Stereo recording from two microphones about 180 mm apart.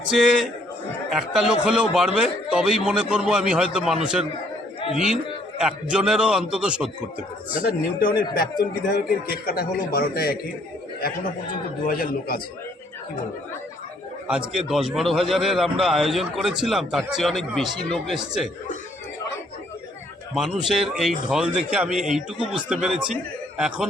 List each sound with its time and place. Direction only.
1.3 s a man's voice: 5° right (ahead or behind)
7.9 s a man's voice: 55° left (ahead or behind)
11.9 s a man's voice: 55° left (ahead or behind)
14.3 s a man's voice: 5° right (ahead or behind)
20.3 s a man's voice: centre (ahead or behind)